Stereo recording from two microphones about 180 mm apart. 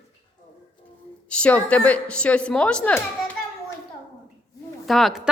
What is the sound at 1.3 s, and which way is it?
A woman's voice, 5° left (ahead or behind).